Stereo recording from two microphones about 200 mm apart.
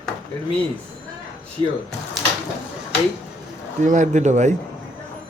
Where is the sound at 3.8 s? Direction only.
40° right (ahead or behind).